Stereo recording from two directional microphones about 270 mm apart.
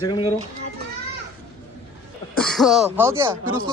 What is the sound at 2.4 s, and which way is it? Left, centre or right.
Speech, centre.